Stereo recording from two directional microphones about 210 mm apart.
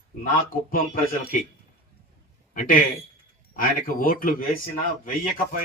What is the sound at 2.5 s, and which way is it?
A man's voice, 40° left (ahead or behind).